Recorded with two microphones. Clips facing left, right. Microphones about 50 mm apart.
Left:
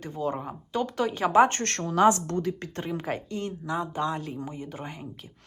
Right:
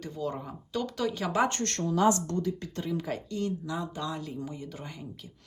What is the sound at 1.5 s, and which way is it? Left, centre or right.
Speech, left.